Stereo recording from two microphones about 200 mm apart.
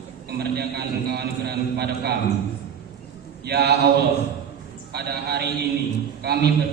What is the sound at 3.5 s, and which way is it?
Speech, 55° right (ahead or behind).